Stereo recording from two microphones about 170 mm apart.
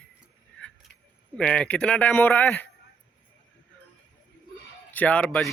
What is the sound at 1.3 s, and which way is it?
Speech, 5° left (ahead or behind).